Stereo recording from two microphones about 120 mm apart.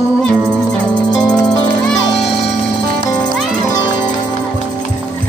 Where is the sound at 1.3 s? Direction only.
10° left (ahead or behind).